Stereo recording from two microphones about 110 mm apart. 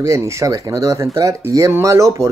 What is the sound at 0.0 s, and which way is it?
Speech, 25° right (ahead or behind).